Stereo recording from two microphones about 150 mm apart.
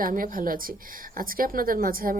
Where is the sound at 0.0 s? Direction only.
65° right (ahead or behind).